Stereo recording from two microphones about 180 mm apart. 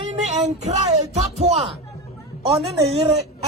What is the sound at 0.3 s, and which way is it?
A man's voice, 40° right (ahead or behind).